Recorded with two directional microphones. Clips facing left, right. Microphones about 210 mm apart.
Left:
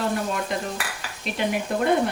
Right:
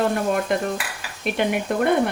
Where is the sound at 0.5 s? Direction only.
55° right (ahead or behind).